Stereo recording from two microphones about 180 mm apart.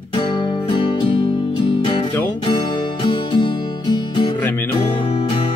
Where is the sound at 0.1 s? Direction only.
25° left (ahead or behind).